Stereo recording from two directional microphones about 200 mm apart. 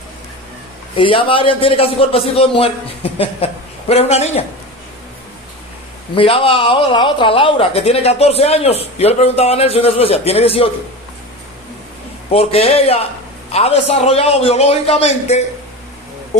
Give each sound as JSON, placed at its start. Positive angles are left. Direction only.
{"t": 0.9, "sound": "a man's voice", "side_deg": 25}
{"t": 6.1, "sound": "speech", "side_deg": 30}
{"t": 12.3, "sound": "a man's voice", "side_deg": 30}